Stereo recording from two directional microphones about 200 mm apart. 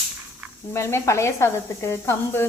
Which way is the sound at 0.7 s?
15° left (ahead or behind).